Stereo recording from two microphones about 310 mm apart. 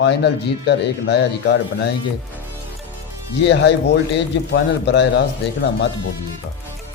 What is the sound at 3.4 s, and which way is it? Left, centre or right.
A man's voice, left.